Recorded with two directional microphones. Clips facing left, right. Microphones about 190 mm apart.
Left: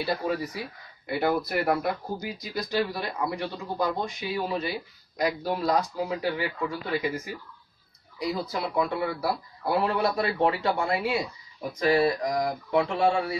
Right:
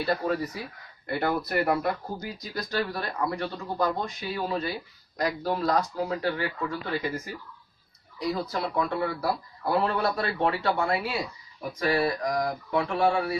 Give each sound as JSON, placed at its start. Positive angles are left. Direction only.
{"t": 0.0, "sound": "speech", "side_deg": 5}